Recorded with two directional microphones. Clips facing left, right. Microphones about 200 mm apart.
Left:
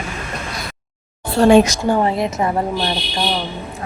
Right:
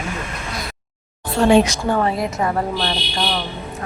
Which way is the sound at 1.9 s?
25° left (ahead or behind).